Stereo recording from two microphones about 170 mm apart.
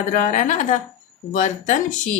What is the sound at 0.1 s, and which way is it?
Speech, 45° left (ahead or behind).